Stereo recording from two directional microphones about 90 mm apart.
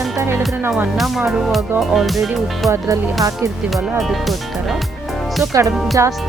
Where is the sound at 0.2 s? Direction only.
30° right (ahead or behind).